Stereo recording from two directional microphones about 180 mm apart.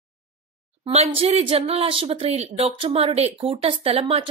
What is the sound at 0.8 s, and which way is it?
Speech, 30° right (ahead or behind).